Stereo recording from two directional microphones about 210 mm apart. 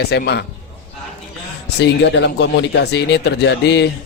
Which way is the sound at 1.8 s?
55° left (ahead or behind).